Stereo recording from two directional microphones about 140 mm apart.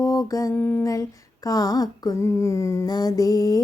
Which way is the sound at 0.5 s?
10° left (ahead or behind).